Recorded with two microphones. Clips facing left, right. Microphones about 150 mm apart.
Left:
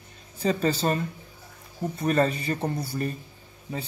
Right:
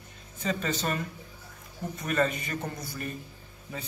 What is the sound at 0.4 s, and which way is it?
Speech, 35° left (ahead or behind).